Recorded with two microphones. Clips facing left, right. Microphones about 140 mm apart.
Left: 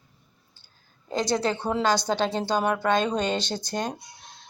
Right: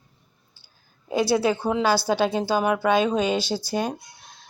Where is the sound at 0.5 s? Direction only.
10° right (ahead or behind).